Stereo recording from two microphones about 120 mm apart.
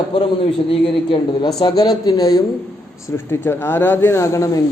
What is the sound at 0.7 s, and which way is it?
A man's voice, 45° left (ahead or behind).